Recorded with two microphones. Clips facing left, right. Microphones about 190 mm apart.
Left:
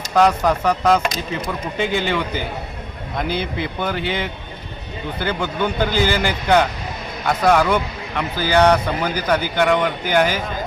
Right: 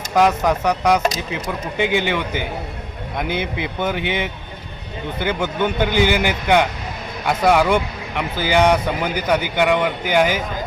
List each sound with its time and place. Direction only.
0.1 s speech: 5° right (ahead or behind)
0.4 s speech: 15° right (ahead or behind)
5.4 s speech: 20° right (ahead or behind)